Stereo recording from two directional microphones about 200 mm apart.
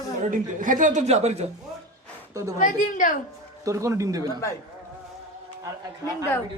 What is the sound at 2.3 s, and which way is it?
Speech, 15° right (ahead or behind).